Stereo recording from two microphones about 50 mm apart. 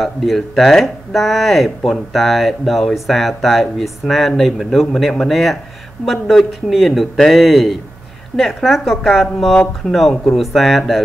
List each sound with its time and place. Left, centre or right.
0.0 s speech: centre